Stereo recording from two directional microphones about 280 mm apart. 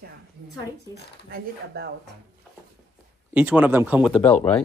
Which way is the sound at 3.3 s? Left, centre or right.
Centre.